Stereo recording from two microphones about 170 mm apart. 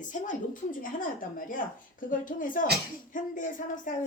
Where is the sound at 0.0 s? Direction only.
45° left (ahead or behind).